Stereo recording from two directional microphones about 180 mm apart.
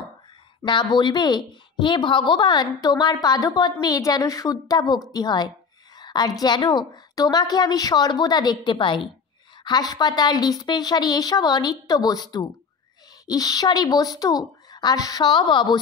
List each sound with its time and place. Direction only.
0.7 s a woman's voice: 25° left (ahead or behind)